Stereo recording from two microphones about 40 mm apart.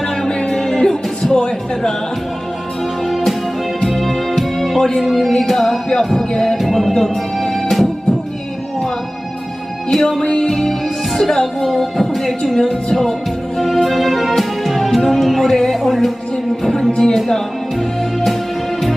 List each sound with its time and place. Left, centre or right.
0.0 s music: centre
3.1 s music: centre
6.9 s organ: centre
9.9 s music: centre
13.8 s music: centre
15.7 s music: centre
16.6 s music: centre